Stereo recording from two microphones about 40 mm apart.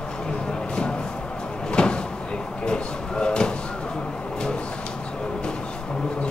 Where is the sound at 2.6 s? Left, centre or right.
Left.